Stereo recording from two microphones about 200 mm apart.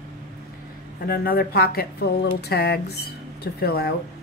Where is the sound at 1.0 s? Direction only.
50° left (ahead or behind).